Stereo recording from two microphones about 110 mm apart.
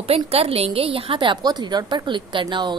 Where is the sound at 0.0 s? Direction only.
65° right (ahead or behind).